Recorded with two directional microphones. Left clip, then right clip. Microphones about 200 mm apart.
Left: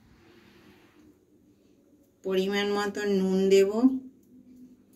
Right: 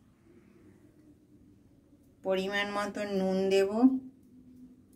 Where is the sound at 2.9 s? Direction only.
50° right (ahead or behind).